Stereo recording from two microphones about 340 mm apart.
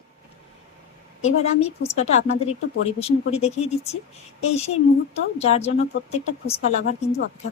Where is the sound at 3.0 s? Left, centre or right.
Centre.